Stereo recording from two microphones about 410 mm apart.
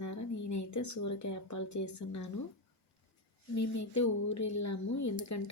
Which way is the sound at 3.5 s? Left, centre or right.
Left.